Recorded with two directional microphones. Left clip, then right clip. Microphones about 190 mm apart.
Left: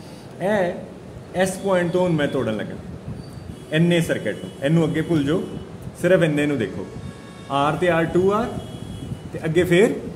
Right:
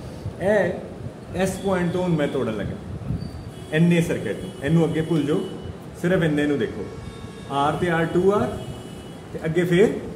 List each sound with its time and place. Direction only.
0.4 s a man's voice: 55° left (ahead or behind)
3.7 s a man's voice: 55° left (ahead or behind)
9.4 s a man's voice: 60° left (ahead or behind)